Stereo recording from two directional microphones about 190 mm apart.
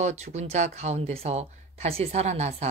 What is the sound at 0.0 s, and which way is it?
Speech, 35° right (ahead or behind).